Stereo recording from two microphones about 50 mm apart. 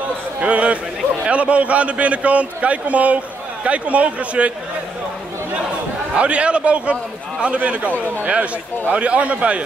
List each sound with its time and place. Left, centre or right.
0.4 s a sound: right
1.2 s a man's voice: right
6.1 s a man's voice: right